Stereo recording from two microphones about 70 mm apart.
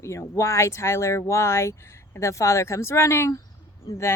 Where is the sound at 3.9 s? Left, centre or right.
Left.